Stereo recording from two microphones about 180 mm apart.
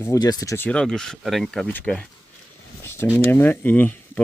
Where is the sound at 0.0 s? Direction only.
20° left (ahead or behind).